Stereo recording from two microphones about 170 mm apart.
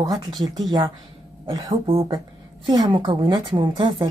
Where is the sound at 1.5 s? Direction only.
20° right (ahead or behind).